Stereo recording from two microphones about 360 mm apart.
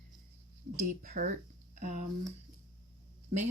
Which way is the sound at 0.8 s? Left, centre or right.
Right.